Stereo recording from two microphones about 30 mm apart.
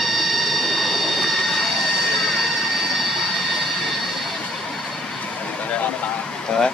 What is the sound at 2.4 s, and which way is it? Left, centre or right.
Vehicle, centre.